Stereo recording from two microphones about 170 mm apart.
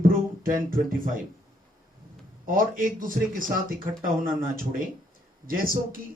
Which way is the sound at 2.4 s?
55° right (ahead or behind).